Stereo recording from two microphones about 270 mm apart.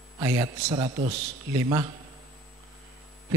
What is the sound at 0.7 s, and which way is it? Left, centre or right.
Speech, right.